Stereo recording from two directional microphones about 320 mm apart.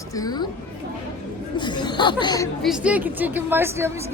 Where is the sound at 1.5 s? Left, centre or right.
Centre.